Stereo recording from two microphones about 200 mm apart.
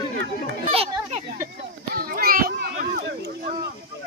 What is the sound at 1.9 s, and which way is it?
Children playing, 45° right (ahead or behind).